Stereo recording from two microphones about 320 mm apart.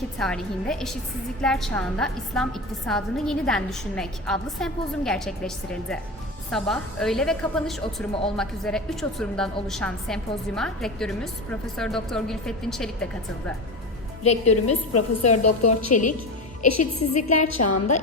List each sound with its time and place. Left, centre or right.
0.2 s a woman's voice: centre
6.5 s a woman's voice: centre
14.5 s a woman's voice: left